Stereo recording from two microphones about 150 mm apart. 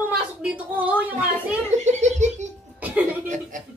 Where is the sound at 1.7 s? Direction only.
50° right (ahead or behind).